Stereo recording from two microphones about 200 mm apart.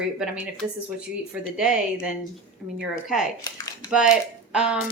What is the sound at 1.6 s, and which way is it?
Speech, 5° right (ahead or behind).